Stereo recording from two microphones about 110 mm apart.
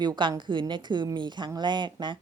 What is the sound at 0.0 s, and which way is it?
Speech, 40° right (ahead or behind).